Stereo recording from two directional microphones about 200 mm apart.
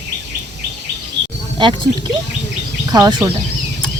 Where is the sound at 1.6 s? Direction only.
25° right (ahead or behind).